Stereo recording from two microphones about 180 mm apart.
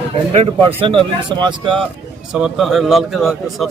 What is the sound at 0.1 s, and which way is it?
Speech, 35° right (ahead or behind).